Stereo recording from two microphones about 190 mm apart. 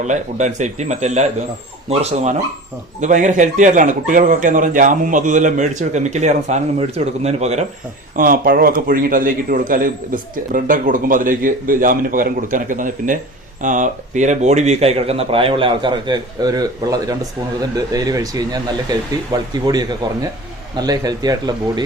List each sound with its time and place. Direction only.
0.1 s a man's voice: 40° right (ahead or behind)
8.1 s a man's voice: 50° right (ahead or behind); by 21.8 s 20° right (ahead or behind)